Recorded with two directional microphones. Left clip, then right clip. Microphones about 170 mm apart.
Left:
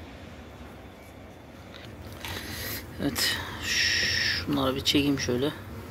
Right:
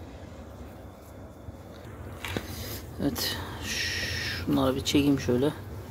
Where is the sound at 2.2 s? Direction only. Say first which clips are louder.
Even; 10° right (ahead or behind); by 5.5 s 35° right (ahead or behind).